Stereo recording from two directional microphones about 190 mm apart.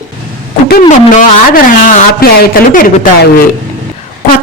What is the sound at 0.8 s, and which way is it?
A man's voice, 40° left (ahead or behind).